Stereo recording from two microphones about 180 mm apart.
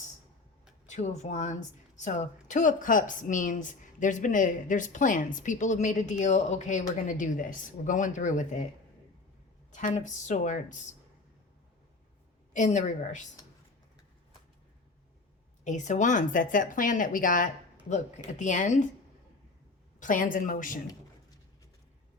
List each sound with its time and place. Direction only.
0.9 s speech: 40° left (ahead or behind)
9.7 s speech: 45° left (ahead or behind)
12.5 s speech: 40° left (ahead or behind)
15.6 s speech: 40° left (ahead or behind)
20.0 s speech: 45° left (ahead or behind)